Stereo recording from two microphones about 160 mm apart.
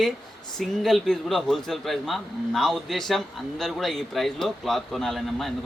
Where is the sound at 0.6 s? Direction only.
Centre (ahead or behind).